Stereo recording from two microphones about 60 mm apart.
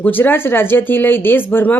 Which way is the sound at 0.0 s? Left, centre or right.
Left.